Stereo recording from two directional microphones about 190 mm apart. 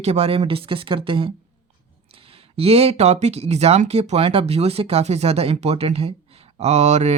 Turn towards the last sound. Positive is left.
turn(degrees=-35)  # may be behind; listen again after turning